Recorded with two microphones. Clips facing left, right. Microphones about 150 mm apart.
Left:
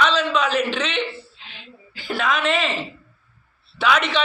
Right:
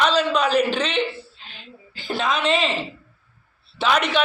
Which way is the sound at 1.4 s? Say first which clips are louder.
Even; 40° right (ahead or behind).